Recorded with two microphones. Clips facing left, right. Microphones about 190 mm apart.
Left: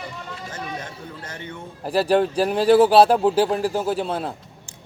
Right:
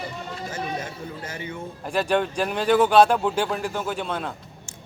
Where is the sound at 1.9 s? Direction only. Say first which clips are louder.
Left 4 dB; 35° left (ahead or behind).